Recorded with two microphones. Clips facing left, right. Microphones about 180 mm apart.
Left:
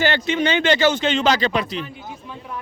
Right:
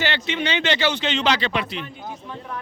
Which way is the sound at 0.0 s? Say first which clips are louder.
Left 5 dB; 45° left (ahead or behind).